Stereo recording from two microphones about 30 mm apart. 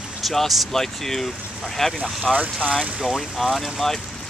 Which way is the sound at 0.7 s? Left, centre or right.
Centre.